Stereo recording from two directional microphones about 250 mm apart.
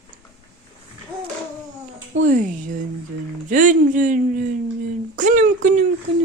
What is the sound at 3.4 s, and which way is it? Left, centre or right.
Speech, right.